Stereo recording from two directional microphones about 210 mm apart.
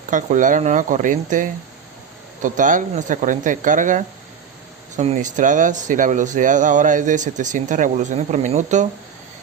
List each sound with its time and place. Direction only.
0.1 s speech: 35° right (ahead or behind)